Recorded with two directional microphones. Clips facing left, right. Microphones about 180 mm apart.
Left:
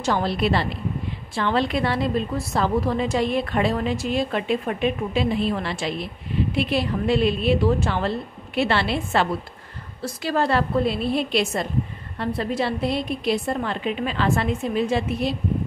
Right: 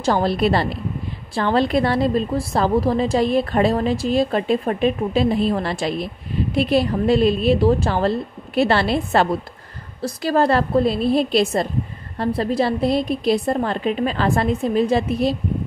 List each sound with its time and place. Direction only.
0.0 s a woman's voice: 40° right (ahead or behind)